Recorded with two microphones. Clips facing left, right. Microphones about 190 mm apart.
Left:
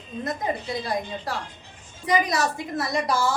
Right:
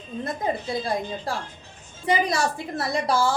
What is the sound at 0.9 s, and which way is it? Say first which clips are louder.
A woman's voice: right 1 dB; 25° right (ahead or behind).